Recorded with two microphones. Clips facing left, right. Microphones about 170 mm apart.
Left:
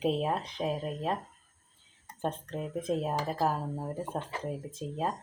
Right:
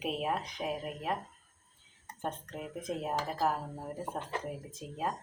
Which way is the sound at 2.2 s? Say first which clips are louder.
Left 5 dB; 30° left (ahead or behind).